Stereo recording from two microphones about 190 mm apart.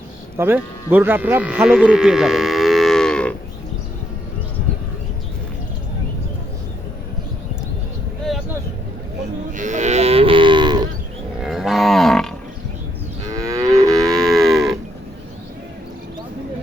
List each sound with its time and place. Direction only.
0.3 s speech: 10° right (ahead or behind)
9.5 s livestock: 40° right (ahead or behind); by 10.8 s 25° right (ahead or behind)
11.4 s livestock: centre (ahead or behind)
13.3 s livestock: 20° right (ahead or behind)
14.2 s moo: centre (ahead or behind)